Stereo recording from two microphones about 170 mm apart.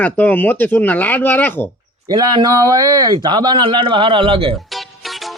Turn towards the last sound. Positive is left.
turn(degrees=0)  # may be behind; listen again after turning